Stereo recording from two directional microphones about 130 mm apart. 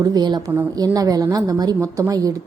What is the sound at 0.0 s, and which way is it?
A woman's voice, 30° right (ahead or behind).